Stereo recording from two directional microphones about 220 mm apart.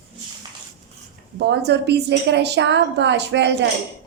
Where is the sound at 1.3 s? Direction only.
50° right (ahead or behind).